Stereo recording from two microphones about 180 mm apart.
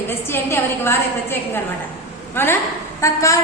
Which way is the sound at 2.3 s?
15° left (ahead or behind).